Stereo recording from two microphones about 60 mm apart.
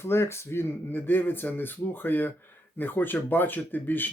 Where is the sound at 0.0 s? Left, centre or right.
Left.